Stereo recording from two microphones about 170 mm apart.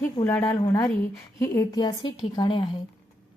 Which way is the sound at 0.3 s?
15° left (ahead or behind).